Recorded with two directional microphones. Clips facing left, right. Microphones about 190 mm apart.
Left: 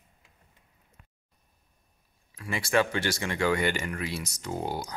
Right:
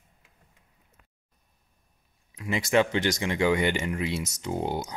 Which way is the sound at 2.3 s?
20° right (ahead or behind).